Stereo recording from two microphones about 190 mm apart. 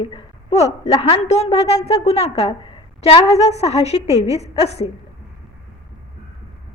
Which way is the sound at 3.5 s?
35° left (ahead or behind).